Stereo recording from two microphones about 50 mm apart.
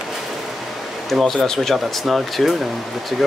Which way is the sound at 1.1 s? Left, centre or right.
Centre.